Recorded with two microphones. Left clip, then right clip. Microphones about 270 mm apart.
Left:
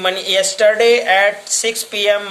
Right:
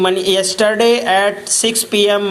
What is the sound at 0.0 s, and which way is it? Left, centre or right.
Speech, centre.